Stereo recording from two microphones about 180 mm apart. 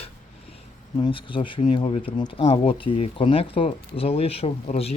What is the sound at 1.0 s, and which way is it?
Speech, 30° left (ahead or behind).